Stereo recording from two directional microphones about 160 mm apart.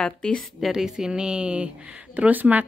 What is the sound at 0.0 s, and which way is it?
A woman's voice, 5° left (ahead or behind).